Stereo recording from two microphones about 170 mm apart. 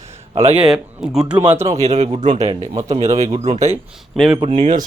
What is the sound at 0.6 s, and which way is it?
Speech, 5° right (ahead or behind).